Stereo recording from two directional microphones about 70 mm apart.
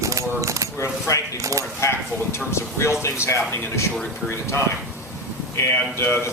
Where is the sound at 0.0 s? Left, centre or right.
Right.